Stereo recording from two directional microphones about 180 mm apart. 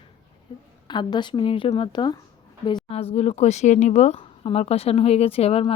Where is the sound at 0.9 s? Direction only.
25° left (ahead or behind).